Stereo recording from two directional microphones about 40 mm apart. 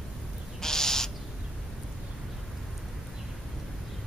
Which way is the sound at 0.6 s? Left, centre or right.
Centre.